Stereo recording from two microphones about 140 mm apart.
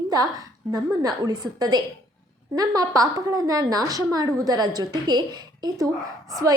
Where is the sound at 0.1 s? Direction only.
25° right (ahead or behind).